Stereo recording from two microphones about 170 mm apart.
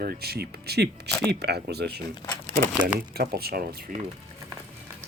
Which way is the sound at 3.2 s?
65° right (ahead or behind).